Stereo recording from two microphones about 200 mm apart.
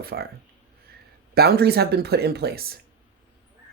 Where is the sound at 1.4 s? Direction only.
55° right (ahead or behind).